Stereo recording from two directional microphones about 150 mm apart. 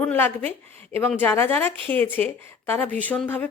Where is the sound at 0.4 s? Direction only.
45° right (ahead or behind).